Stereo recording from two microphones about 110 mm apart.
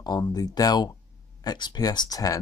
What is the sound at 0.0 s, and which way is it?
Speech, 40° left (ahead or behind).